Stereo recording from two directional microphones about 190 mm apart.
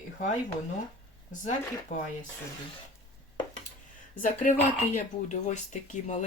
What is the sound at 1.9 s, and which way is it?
Speech, 40° left (ahead or behind).